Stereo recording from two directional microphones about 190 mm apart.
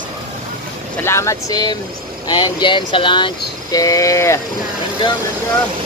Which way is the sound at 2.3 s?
25° left (ahead or behind).